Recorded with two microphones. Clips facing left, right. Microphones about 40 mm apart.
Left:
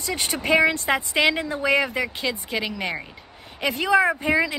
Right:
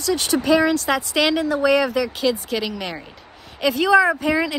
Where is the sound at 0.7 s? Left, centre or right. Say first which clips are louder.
Right 2 dB; left.